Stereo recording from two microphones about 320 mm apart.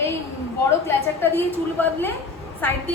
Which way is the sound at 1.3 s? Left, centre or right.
Centre.